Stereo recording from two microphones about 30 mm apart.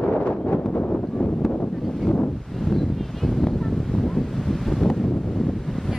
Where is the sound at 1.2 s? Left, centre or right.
Left.